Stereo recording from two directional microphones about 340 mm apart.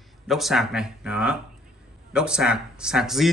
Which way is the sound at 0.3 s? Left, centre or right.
Centre.